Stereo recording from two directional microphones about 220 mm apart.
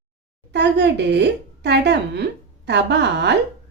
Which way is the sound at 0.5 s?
50° right (ahead or behind).